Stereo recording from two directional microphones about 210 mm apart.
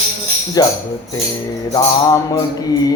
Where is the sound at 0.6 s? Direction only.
15° left (ahead or behind).